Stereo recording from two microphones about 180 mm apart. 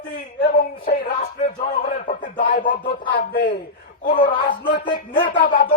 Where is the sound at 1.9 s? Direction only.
45° left (ahead or behind).